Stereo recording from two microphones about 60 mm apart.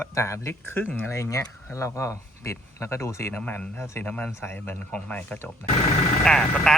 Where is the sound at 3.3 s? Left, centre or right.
Left.